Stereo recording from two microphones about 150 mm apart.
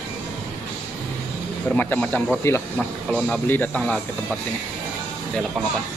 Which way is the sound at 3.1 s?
Centre (ahead or behind).